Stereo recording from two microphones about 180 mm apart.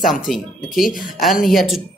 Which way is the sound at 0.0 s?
Centre (ahead or behind).